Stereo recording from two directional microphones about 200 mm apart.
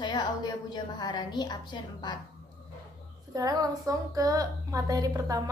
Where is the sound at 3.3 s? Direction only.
20° right (ahead or behind).